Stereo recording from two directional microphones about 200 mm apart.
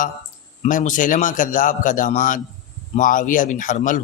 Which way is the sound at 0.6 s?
40° left (ahead or behind).